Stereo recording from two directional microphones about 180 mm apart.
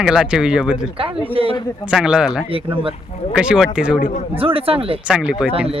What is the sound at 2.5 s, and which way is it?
Speech, 30° right (ahead or behind).